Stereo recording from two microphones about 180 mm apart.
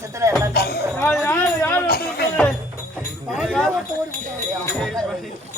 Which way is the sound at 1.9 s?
60° left (ahead or behind).